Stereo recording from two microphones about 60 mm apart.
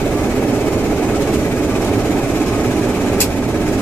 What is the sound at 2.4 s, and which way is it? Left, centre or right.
Vehicle, centre.